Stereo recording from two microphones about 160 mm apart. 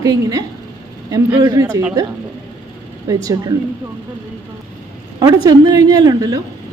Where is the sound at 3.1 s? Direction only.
20° right (ahead or behind).